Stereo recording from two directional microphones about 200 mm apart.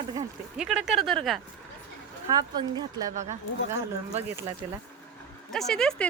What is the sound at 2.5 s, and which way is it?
Speech, 20° right (ahead or behind).